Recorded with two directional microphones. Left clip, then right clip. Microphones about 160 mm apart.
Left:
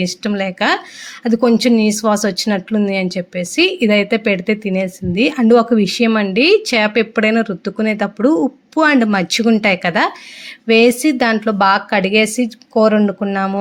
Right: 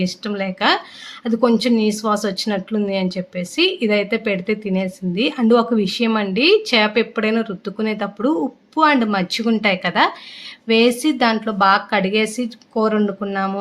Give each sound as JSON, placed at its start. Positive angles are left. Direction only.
{"t": 0.0, "sound": "speech", "side_deg": 30}